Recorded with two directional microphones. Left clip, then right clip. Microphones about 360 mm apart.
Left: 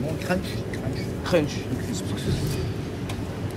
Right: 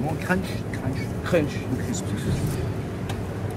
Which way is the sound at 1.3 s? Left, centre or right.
Left.